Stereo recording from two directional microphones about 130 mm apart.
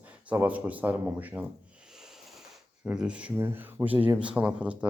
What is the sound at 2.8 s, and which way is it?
Speech, 10° right (ahead or behind).